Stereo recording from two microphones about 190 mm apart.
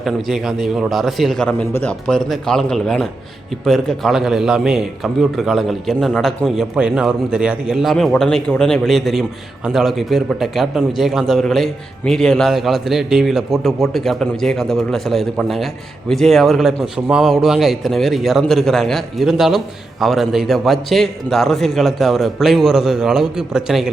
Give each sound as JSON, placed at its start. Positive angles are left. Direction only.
{"t": 0.0, "sound": "a man's voice", "side_deg": 0}